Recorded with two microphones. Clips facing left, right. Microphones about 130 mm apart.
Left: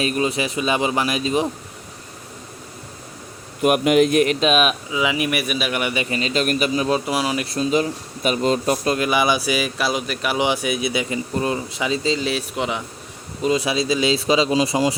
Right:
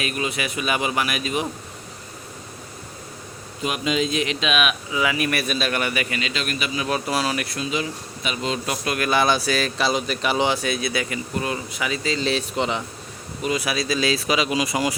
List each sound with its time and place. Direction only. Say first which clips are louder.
0.0 s speech: left 5 dB; 35° left (ahead or behind)
3.6 s speech: left 8 dB; 60° left (ahead or behind); by 4.7 s 40° left (ahead or behind)
4.9 s a man's voice: left 2 dB; 20° left (ahead or behind); by 6.8 s 40° left (ahead or behind)
6.8 s a man's voice: left 3 dB; 20° left (ahead or behind)
7.4 s speech: left 7 dB; 35° left (ahead or behind)
9.0 s a man's voice: left 1 dB; 10° left (ahead or behind)
10.4 s a man's voice: left 2 dB; 15° left (ahead or behind)
12.2 s a man's voice: even; 5° left (ahead or behind)
13.4 s a man's voice: left 4 dB; 30° left (ahead or behind)